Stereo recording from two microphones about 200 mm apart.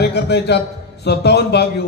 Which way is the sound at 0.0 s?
55° left (ahead or behind).